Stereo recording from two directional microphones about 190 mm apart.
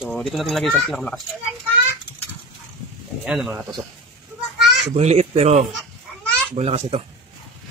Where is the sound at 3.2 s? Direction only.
5° right (ahead or behind).